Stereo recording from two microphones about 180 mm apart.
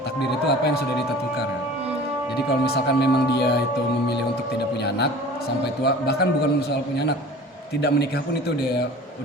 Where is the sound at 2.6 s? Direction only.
65° left (ahead or behind).